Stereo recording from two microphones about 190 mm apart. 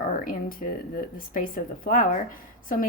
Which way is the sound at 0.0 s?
45° left (ahead or behind).